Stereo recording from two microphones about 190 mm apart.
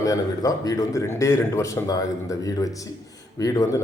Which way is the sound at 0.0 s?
20° left (ahead or behind).